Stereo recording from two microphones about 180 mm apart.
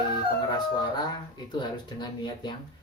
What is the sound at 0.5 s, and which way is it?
Speech, 25° left (ahead or behind).